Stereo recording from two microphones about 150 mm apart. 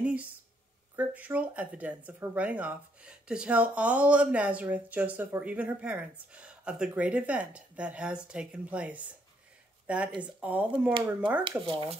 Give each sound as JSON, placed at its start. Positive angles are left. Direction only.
{"t": 0.0, "sound": "a sound", "side_deg": -10}
{"t": 0.9, "sound": "speech", "side_deg": -10}
{"t": 11.6, "sound": "speech", "side_deg": -35}